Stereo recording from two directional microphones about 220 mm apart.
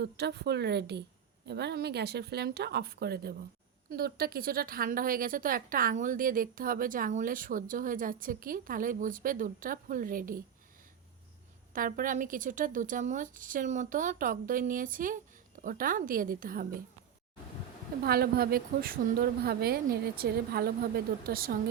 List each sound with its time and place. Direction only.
0.0 s a woman's voice: 50° right (ahead or behind)
11.7 s a woman's voice: 40° right (ahead or behind)
18.0 s a woman's voice: 45° right (ahead or behind)